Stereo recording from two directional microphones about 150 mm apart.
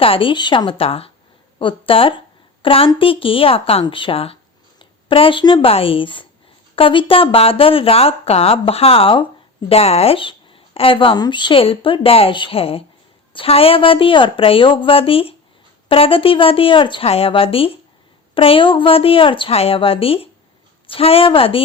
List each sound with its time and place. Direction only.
0.0 s speech: 35° left (ahead or behind)